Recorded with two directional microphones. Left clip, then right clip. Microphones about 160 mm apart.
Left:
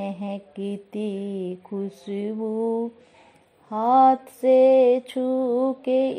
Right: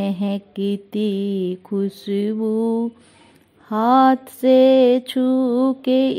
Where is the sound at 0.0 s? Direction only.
5° right (ahead or behind).